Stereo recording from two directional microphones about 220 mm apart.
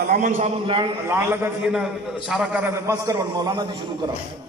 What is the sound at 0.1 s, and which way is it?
Speech, 35° right (ahead or behind).